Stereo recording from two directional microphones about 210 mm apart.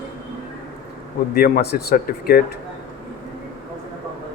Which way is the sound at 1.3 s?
45° left (ahead or behind).